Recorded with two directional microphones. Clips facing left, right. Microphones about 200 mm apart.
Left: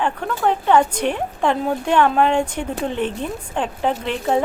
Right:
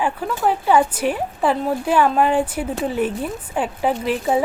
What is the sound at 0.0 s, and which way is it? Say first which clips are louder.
Speech: even; 5° right (ahead or behind).